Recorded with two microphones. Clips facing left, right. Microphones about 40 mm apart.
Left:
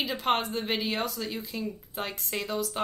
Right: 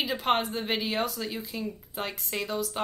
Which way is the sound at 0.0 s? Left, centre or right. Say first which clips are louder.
Right 1 dB; centre.